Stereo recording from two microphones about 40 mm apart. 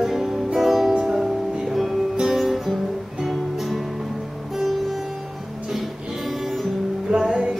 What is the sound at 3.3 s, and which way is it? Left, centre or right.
Music, centre.